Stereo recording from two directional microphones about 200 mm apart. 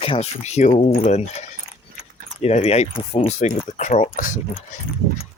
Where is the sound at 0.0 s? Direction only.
30° left (ahead or behind).